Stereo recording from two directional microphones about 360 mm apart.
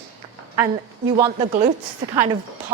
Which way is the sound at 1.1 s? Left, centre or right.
Centre.